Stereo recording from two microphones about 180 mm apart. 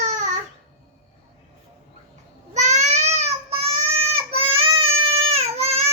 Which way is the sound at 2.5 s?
40° right (ahead or behind).